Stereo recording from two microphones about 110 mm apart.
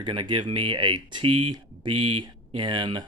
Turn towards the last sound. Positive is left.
turn(degrees=-50)  # may be behind; listen again after turning